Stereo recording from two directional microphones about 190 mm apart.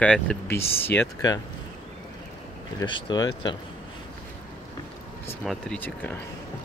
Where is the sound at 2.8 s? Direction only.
25° left (ahead or behind).